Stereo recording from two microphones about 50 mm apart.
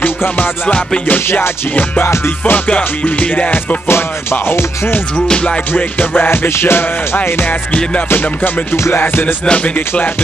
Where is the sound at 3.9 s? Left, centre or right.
Left.